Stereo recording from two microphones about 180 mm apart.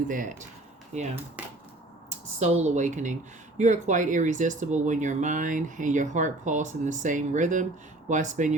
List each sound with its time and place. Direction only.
0.1 s speech: 45° right (ahead or behind)